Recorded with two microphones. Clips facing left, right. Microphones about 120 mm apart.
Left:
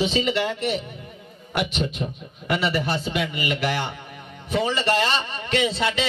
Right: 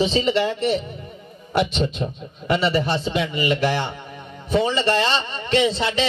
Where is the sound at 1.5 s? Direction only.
25° right (ahead or behind).